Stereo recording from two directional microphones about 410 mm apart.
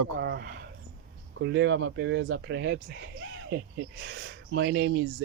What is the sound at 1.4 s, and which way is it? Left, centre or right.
Speech, right.